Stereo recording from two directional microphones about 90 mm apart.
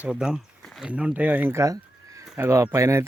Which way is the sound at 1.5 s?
35° right (ahead or behind).